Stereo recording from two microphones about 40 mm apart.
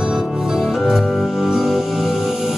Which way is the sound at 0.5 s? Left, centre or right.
Centre.